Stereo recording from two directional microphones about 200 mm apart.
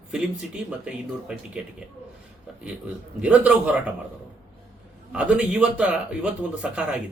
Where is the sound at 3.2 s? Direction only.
5° right (ahead or behind).